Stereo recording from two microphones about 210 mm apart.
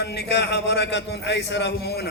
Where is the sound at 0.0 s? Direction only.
50° left (ahead or behind).